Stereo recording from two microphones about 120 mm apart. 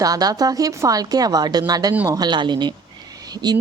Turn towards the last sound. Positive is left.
turn(degrees=-35)  # may be behind; listen again after turning